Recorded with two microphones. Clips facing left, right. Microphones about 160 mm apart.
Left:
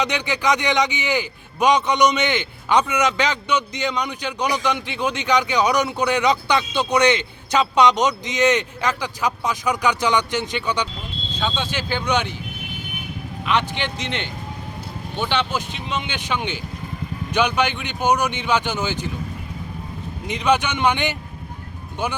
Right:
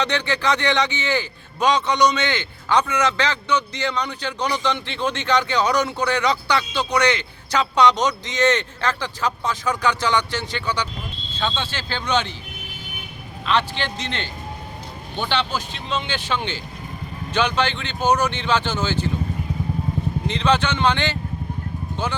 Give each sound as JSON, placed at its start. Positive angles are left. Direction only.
{"t": 0.0, "sound": "a man's voice", "side_deg": 15}
{"t": 13.4, "sound": "a man's voice", "side_deg": 15}
{"t": 15.5, "sound": "a man's voice", "side_deg": 15}
{"t": 20.2, "sound": "a man's voice", "side_deg": 15}